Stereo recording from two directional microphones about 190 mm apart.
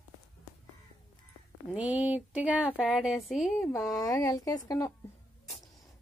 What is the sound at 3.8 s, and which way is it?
Speech, 20° left (ahead or behind).